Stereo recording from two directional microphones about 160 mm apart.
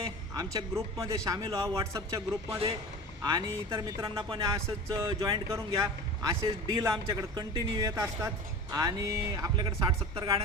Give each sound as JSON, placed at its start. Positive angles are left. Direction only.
{"t": 0.3, "sound": "a man's voice", "side_deg": -20}